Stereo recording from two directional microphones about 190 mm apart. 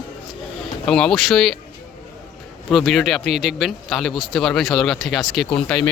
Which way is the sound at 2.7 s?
Centre (ahead or behind).